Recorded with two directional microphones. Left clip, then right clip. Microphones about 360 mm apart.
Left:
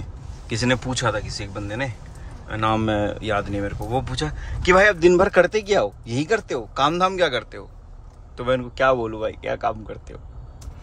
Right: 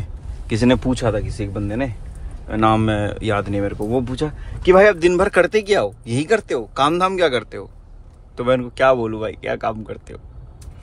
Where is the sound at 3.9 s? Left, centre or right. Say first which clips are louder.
Right 3 dB; centre.